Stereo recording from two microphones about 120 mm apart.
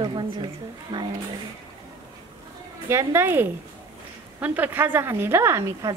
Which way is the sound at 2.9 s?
25° right (ahead or behind).